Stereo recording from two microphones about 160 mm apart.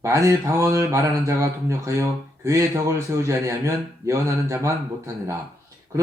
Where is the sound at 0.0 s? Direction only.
20° right (ahead or behind).